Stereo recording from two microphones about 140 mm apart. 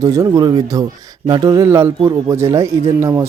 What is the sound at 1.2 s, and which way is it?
Mantra, 35° right (ahead or behind).